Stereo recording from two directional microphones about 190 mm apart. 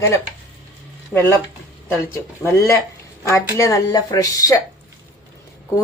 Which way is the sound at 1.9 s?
15° left (ahead or behind).